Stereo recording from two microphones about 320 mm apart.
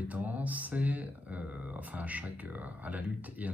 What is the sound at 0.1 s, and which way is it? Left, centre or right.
Speech, centre.